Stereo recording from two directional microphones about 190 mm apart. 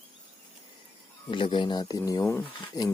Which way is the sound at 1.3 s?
25° left (ahead or behind).